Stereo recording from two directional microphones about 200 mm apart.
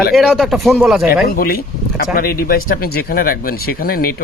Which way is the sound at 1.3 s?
45° left (ahead or behind).